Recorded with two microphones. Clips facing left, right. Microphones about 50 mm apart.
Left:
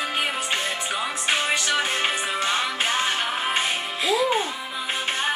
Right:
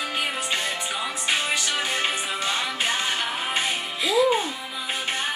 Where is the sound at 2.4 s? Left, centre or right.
Centre.